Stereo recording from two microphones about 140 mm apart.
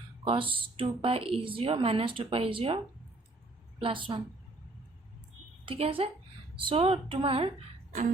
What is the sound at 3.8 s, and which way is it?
Speech, 40° right (ahead or behind).